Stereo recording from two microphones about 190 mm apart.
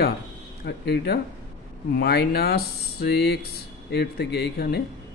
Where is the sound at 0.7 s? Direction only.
60° left (ahead or behind).